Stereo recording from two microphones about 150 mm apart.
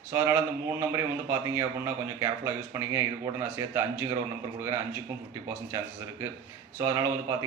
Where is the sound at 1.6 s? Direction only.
15° right (ahead or behind).